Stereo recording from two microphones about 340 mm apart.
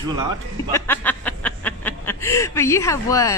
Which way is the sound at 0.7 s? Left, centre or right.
Centre.